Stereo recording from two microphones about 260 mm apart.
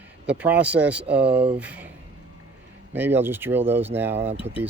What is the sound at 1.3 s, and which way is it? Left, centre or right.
Speech, right.